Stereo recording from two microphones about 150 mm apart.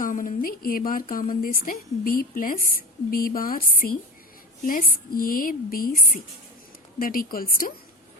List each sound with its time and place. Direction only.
0.0 s a woman's voice: 60° left (ahead or behind)